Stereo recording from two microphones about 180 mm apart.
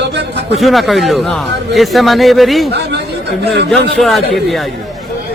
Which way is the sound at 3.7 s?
Centre (ahead or behind).